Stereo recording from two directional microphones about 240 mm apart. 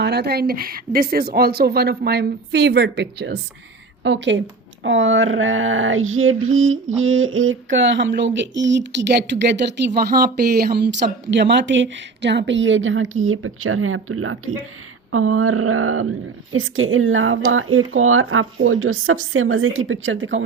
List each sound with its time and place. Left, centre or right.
0.0 s speech: right
10.6 s speech: right